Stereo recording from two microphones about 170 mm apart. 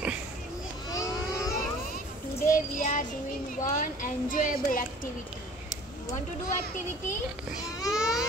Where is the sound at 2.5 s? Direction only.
55° left (ahead or behind).